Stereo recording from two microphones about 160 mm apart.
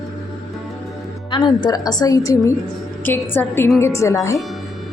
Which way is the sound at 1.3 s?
25° left (ahead or behind).